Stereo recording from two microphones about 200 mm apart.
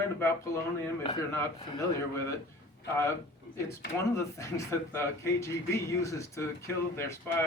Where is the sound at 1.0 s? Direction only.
20° left (ahead or behind).